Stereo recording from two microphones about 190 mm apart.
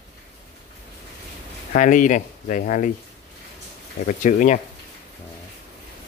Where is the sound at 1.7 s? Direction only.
45° left (ahead or behind).